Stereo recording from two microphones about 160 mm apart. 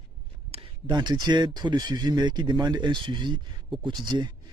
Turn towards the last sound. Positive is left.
turn(degrees=-30)  # may be behind; listen again after turning